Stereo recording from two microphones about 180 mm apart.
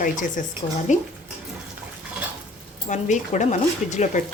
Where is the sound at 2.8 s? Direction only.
40° left (ahead or behind).